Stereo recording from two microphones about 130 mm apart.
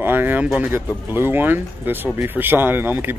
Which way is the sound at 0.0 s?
15° right (ahead or behind).